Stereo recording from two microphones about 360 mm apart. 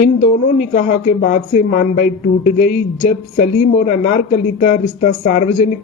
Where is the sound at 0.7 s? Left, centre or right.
Left.